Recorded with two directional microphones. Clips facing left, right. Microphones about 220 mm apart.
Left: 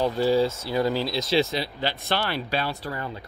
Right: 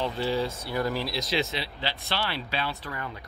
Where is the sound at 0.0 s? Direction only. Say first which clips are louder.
Left 6 dB; 40° left (ahead or behind).